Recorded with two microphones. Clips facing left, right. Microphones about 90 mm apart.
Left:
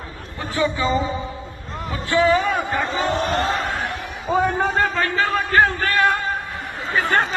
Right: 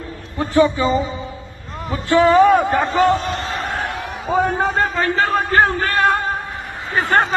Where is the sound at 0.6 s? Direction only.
30° right (ahead or behind).